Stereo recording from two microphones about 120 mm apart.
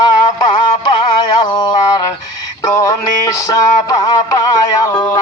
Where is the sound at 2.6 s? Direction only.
25° left (ahead or behind).